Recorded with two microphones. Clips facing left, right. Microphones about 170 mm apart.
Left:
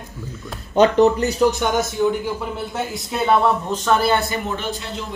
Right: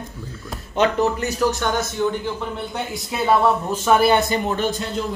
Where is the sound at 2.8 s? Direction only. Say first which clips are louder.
Left 2 dB; centre (ahead or behind); by 4.4 s 20° right (ahead or behind).